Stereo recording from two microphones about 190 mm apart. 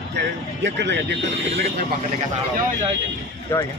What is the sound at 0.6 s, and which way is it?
Speech, 65° right (ahead or behind).